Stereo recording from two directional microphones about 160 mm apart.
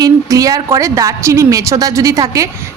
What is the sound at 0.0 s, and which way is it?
A woman's voice, 20° right (ahead or behind).